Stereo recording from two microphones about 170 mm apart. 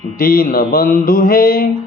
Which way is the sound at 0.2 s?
60° left (ahead or behind).